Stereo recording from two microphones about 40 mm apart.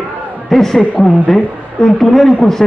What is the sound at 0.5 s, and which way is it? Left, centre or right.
A man's voice, centre.